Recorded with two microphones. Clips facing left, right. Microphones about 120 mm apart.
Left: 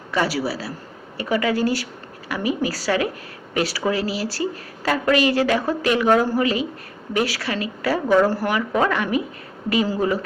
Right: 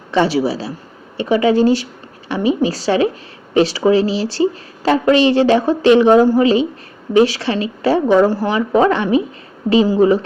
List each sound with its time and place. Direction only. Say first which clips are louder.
0.1 s a woman's voice: right 7 dB; 25° right (ahead or behind)